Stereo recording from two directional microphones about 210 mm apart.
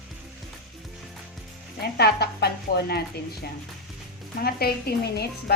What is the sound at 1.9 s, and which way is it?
A woman's voice, 50° left (ahead or behind).